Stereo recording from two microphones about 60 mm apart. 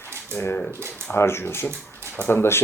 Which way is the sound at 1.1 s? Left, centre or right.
Left.